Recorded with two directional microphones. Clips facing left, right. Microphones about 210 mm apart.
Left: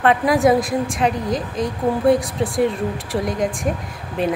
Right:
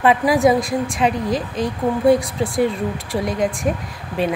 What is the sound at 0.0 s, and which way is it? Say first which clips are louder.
A woman's voice: right 1 dB; centre (ahead or behind).